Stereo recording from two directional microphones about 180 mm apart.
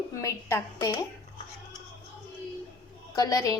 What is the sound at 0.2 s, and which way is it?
Speech, 15° left (ahead or behind).